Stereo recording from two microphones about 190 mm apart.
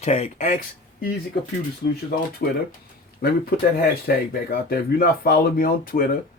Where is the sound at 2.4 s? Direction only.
55° left (ahead or behind).